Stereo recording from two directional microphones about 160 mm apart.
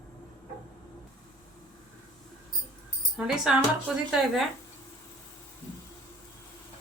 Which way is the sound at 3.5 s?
5° right (ahead or behind).